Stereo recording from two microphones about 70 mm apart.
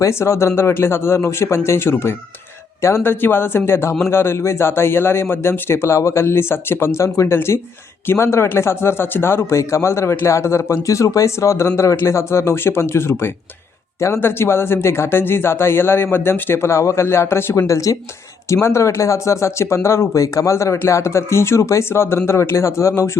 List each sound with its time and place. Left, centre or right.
0.0 s speech: left